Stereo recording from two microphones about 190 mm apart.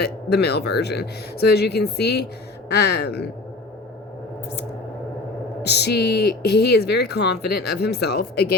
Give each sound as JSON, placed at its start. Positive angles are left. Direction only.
{"t": 0.0, "sound": "speech", "side_deg": 60}
{"t": 5.6, "sound": "speech", "side_deg": 60}